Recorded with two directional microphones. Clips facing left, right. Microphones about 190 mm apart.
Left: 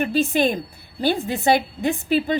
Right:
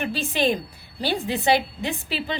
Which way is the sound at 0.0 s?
45° left (ahead or behind).